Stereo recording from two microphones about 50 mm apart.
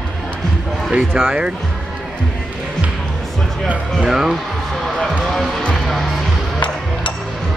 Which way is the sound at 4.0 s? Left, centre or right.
Centre.